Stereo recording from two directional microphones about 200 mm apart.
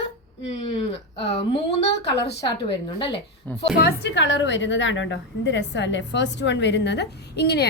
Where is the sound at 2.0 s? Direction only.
60° left (ahead or behind).